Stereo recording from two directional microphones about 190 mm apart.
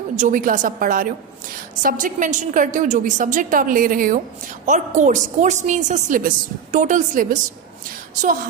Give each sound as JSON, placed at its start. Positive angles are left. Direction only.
{"t": 0.2, "sound": "a woman's voice", "side_deg": -45}